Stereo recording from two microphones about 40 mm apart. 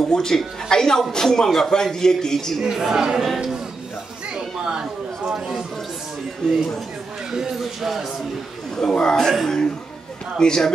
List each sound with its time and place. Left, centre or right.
0.0 s a man's voice: centre
2.6 s speech: centre
4.3 s chatter: centre
6.4 s a man's voice: centre
7.2 s speech: centre
8.7 s a man's voice: centre
10.4 s a man's voice: centre